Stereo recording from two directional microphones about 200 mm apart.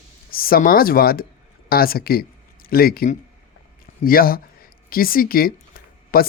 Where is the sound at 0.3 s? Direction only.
45° left (ahead or behind).